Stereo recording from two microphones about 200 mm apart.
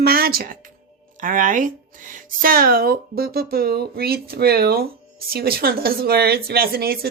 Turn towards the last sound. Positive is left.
turn(degrees=-50)  # may be behind; listen again after turning